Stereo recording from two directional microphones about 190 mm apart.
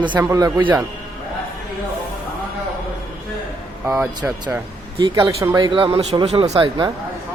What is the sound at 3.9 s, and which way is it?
Speech, 10° right (ahead or behind).